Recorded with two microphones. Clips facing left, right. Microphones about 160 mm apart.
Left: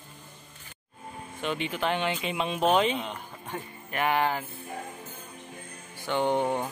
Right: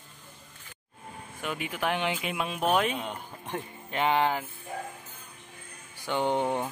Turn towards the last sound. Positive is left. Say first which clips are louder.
# left 1 dB
turn(degrees=15)  # may be behind; listen again after turning